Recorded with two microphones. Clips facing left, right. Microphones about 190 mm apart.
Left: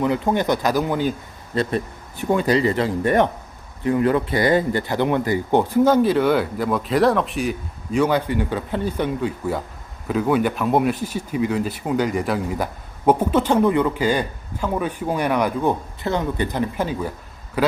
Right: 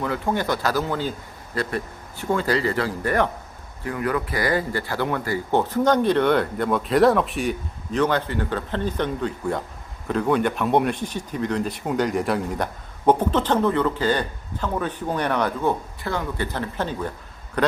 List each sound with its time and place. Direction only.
0.0 s speech: 20° left (ahead or behind); by 7.5 s centre (ahead or behind)
7.9 s speech: 10° left (ahead or behind)